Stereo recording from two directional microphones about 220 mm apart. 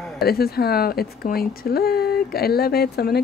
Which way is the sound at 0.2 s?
45° left (ahead or behind).